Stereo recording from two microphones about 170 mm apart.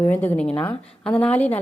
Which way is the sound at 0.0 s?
10° left (ahead or behind).